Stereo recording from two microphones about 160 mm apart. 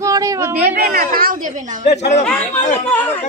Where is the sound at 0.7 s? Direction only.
70° right (ahead or behind).